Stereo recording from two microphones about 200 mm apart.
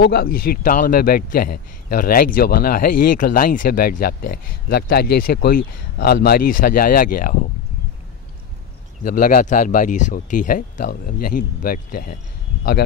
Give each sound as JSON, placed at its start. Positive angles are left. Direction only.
{"t": 0.0, "sound": "a man's voice", "side_deg": 50}
{"t": 9.0, "sound": "a man's voice", "side_deg": 45}